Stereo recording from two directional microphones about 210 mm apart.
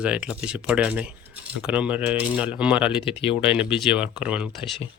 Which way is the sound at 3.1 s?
25° left (ahead or behind).